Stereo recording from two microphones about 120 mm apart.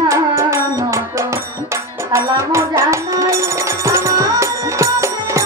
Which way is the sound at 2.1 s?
25° right (ahead or behind).